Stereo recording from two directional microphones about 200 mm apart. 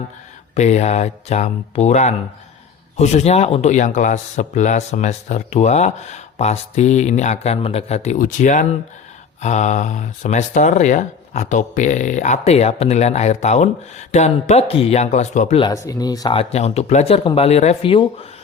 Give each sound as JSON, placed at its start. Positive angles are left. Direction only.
{"t": 0.5, "sound": "speech", "side_deg": 35}
{"t": 15.6, "sound": "speech", "side_deg": 15}
{"t": 16.4, "sound": "speech", "side_deg": 30}